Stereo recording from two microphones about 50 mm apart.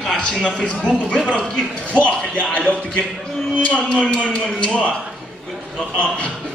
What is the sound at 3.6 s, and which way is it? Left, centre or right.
Speech, left.